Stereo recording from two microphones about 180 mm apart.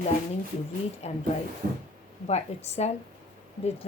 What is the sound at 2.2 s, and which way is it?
Speech, 35° left (ahead or behind).